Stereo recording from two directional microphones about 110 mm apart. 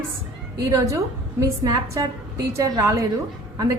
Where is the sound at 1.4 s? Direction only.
30° right (ahead or behind).